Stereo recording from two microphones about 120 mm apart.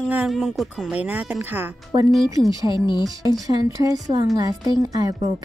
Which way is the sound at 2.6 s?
40° left (ahead or behind).